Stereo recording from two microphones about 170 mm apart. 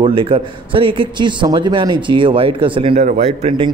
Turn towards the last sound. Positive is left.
turn(degrees=-35)  # may be behind; listen again after turning